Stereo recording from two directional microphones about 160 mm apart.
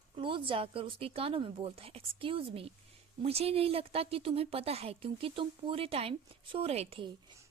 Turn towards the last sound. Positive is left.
turn(degrees=-40)  # may be behind; listen again after turning